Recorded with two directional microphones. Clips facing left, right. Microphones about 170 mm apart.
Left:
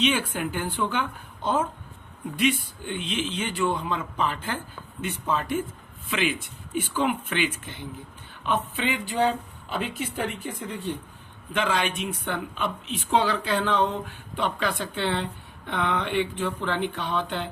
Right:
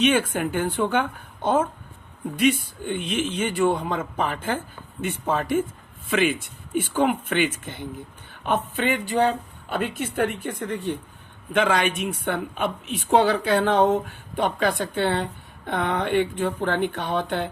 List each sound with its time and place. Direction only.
0.0 s speech: 55° right (ahead or behind)
2.4 s speech: 50° right (ahead or behind)